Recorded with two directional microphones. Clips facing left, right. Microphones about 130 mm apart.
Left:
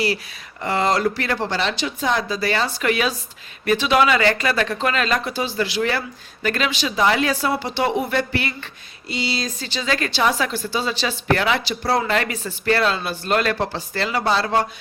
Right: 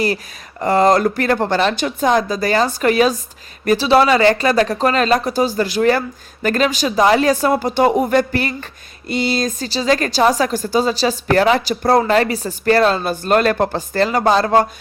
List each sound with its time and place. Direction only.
0.6 s a woman's voice: 45° right (ahead or behind)